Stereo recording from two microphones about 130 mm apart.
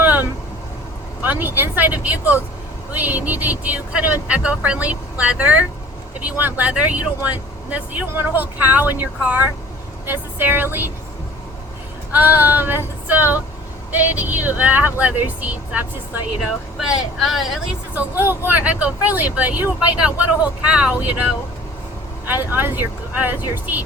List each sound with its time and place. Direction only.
0.0 s vehicle: 10° right (ahead or behind)
1.2 s speech: 15° right (ahead or behind)
12.1 s speech: 15° right (ahead or behind)
16.9 s speech: centre (ahead or behind)
18.2 s speech: 15° right (ahead or behind)
22.5 s speech: 15° right (ahead or behind)